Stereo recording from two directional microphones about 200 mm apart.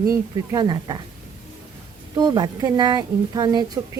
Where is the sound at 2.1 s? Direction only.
20° right (ahead or behind).